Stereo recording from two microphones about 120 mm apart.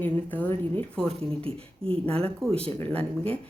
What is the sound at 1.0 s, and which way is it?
Speech, 50° right (ahead or behind).